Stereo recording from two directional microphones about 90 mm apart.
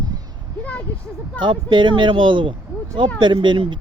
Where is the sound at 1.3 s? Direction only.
60° right (ahead or behind).